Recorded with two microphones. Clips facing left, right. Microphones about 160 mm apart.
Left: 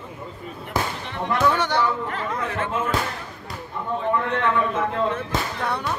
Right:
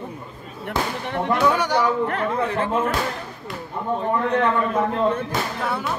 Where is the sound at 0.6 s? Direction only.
55° right (ahead or behind).